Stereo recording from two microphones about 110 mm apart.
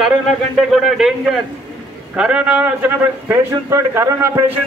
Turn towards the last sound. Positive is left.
turn(degrees=-25)  # may be behind; listen again after turning